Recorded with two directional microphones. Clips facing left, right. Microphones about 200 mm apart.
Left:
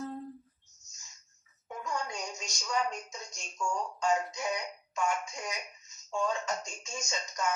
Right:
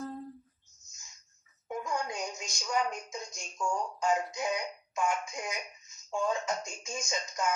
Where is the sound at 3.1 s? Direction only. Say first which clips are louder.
Right 4 dB; 15° right (ahead or behind).